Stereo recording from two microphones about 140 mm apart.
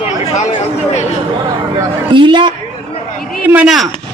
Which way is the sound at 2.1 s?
35° right (ahead or behind).